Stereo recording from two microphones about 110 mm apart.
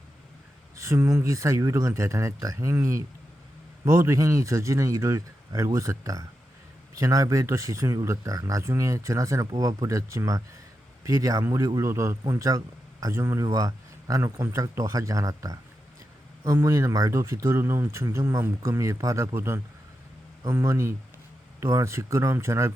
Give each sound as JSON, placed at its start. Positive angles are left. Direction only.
{"t": 0.8, "sound": "speech", "side_deg": -30}
{"t": 13.4, "sound": "speech", "side_deg": -35}